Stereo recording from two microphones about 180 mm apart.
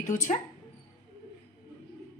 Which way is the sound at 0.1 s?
45° left (ahead or behind).